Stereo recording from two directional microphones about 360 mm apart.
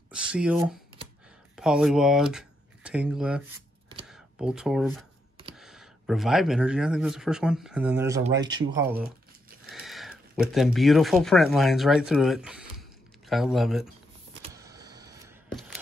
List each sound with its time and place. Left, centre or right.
0.1 s speech: centre
14.4 s power windows: centre